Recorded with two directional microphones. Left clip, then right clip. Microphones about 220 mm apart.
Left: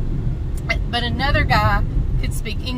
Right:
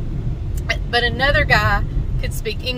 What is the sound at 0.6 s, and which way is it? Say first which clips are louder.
Speech: right 4 dB; 5° right (ahead or behind).